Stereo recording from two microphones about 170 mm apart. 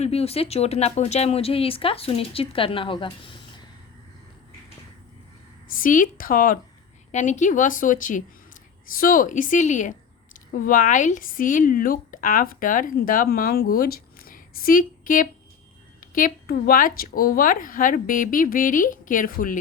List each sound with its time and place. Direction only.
0.0 s speech: 35° left (ahead or behind)
5.7 s speech: 50° left (ahead or behind)